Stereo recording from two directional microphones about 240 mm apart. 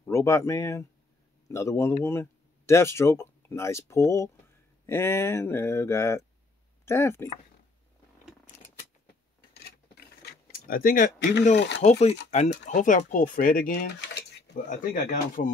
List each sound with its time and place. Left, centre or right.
0.0 s speech: centre
10.5 s speech: left
12.3 s speech: left